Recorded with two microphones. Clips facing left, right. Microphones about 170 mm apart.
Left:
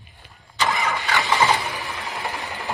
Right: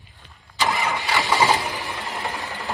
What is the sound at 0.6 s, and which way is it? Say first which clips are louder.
Vehicle: even; centre (ahead or behind).